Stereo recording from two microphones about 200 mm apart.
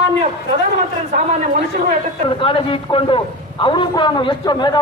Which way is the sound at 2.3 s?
25° left (ahead or behind).